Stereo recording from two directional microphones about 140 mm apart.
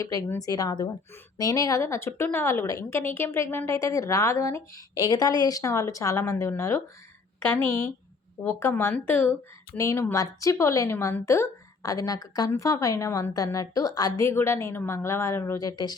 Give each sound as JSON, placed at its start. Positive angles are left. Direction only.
{"t": 0.0, "sound": "a woman's voice", "side_deg": 25}